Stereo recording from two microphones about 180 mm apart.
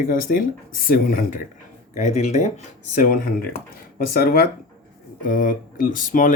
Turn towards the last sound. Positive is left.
turn(degrees=45)  # may be behind; listen again after turning